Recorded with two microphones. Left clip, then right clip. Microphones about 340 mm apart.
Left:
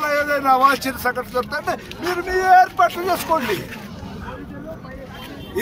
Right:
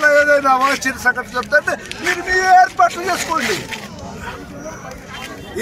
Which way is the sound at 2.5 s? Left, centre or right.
Centre.